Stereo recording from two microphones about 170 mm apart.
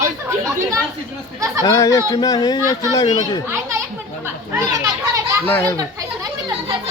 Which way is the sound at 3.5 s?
15° right (ahead or behind).